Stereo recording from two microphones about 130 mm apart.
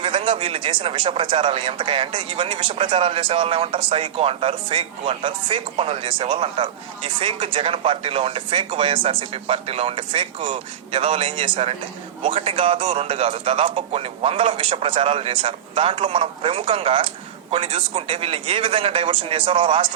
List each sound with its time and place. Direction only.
0.0 s a man's voice: 45° right (ahead or behind)